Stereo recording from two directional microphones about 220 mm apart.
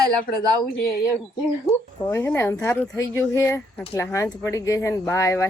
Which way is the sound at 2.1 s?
10° left (ahead or behind).